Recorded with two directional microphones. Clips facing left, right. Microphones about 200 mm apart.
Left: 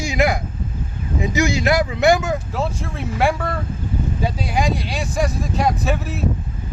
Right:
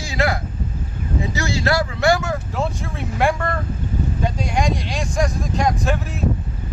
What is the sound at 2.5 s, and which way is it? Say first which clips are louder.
Speech: even; centre (ahead or behind).